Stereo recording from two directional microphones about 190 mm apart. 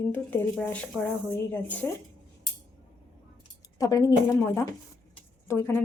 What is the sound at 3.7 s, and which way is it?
Speech, 20° left (ahead or behind).